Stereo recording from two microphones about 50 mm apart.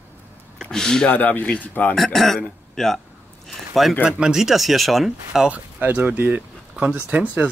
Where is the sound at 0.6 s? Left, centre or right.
Centre.